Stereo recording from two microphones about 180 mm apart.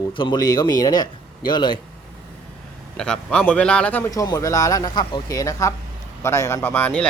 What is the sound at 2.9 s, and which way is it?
Speech, 5° left (ahead or behind).